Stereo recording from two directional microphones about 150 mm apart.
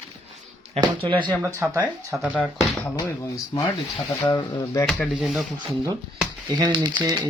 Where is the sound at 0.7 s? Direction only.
35° right (ahead or behind).